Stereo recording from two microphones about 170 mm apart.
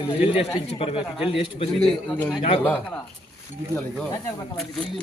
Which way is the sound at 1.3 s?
35° left (ahead or behind).